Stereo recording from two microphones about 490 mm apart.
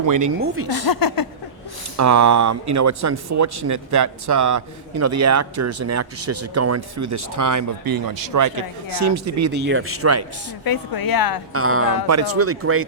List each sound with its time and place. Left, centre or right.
0.0 s a man's voice: right
0.9 s a woman's voice: left
2.0 s a man's voice: right
10.6 s a woman's voice: left
11.5 s speech: right